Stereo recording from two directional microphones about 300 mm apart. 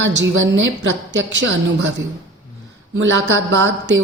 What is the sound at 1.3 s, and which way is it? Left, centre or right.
Speech, right.